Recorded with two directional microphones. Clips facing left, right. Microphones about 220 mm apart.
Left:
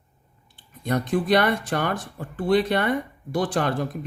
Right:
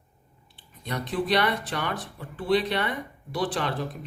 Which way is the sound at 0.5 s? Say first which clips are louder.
Left 8 dB; 50° left (ahead or behind).